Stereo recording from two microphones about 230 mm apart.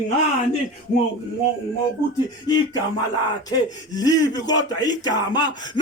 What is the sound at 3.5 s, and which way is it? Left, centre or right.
Speech, centre.